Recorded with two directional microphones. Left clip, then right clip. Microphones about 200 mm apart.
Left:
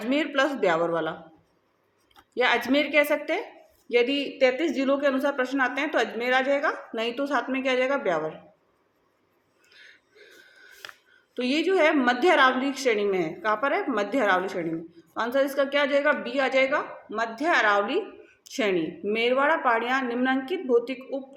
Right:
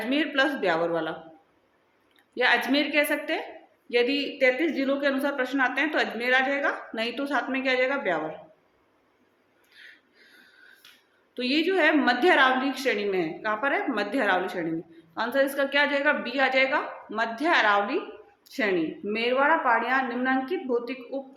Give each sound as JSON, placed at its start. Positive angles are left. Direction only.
{"t": 0.0, "sound": "speech", "side_deg": 30}
{"t": 2.3, "sound": "speech", "side_deg": 25}
{"t": 11.3, "sound": "speech", "side_deg": 25}
{"t": 19.1, "sound": "speech", "side_deg": 20}